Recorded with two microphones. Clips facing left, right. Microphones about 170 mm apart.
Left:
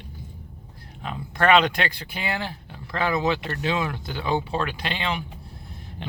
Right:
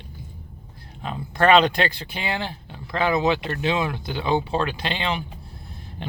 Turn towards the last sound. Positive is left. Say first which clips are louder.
# right 2 dB
turn(degrees=-30)  # may be behind; listen again after turning